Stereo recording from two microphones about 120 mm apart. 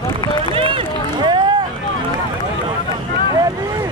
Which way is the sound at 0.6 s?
50° right (ahead or behind).